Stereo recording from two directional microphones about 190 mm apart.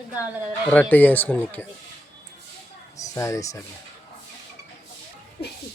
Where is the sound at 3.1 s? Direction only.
15° left (ahead or behind).